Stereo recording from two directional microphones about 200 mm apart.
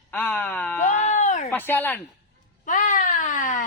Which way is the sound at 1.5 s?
10° left (ahead or behind).